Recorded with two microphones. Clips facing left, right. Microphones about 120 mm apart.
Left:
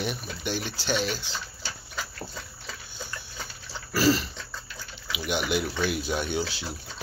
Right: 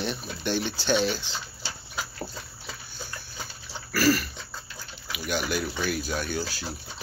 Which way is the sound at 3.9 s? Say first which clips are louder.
Even; 25° left (ahead or behind).